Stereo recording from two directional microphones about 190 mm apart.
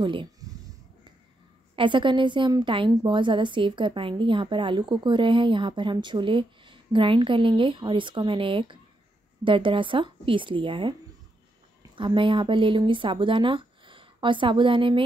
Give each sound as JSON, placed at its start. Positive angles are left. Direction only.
{"t": 0.0, "sound": "speech", "side_deg": -25}
{"t": 1.8, "sound": "a woman's voice", "side_deg": -25}